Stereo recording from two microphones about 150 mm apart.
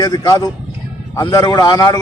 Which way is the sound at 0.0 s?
25° left (ahead or behind).